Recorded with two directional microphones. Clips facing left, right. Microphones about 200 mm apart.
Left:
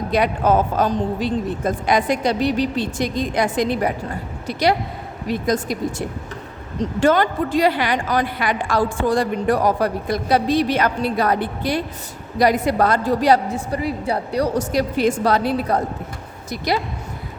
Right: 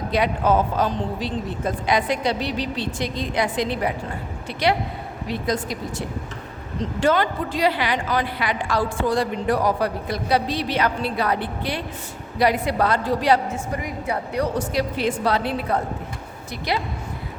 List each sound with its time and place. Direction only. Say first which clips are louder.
0.1 s a woman's voice: left 2 dB; 50° left (ahead or behind)
5.3 s a woman's voice: left 4 dB; 45° left (ahead or behind)
7.0 s a woman's voice: left 3 dB; 45° left (ahead or behind)